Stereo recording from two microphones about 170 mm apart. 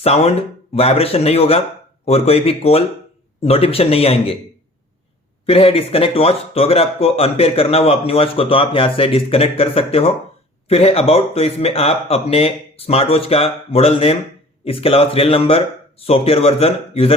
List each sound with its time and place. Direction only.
0.0 s speech: 35° left (ahead or behind)
5.5 s speech: 35° left (ahead or behind)